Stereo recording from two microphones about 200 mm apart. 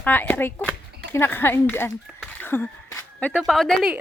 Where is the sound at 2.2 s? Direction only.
10° left (ahead or behind).